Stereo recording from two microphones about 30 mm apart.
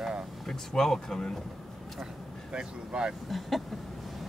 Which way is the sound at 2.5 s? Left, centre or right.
Right.